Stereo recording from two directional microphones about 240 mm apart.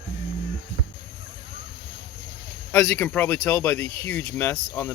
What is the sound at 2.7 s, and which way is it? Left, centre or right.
Speech, centre.